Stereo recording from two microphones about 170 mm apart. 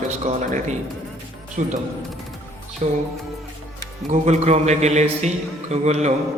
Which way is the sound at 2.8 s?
40° right (ahead or behind).